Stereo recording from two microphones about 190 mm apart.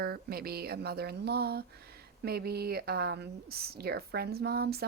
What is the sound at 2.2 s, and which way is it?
A woman's voice, 55° right (ahead or behind).